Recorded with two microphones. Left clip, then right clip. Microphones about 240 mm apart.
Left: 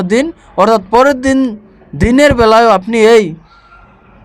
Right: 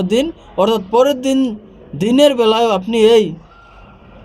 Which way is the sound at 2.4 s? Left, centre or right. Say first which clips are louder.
Left 6 dB; left.